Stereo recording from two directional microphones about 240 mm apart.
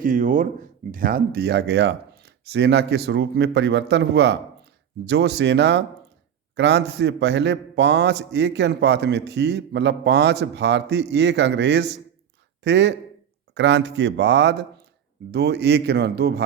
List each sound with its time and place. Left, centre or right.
0.0 s a man's voice: right